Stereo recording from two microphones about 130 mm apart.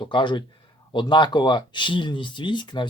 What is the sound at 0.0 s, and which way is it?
Speech, 35° left (ahead or behind).